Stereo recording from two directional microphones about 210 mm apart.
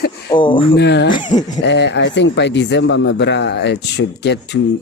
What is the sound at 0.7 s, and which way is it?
Speech, 55° left (ahead or behind).